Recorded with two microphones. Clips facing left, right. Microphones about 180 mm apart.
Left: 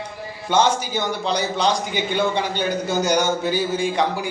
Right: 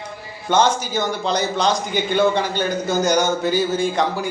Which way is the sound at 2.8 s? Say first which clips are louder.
Right 2 dB; 10° left (ahead or behind).